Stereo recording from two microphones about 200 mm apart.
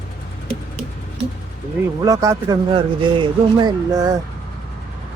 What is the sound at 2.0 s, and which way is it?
Speech, 15° right (ahead or behind).